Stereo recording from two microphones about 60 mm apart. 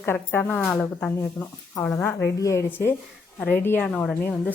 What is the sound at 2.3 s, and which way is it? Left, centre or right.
Speech, left.